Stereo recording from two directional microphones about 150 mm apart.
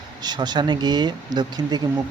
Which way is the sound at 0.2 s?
30° right (ahead or behind).